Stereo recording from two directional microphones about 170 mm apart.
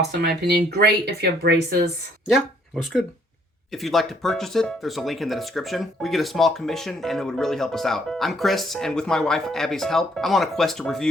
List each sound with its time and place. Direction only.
0.2 s speech: 75° right (ahead or behind)
2.3 s speech: centre (ahead or behind)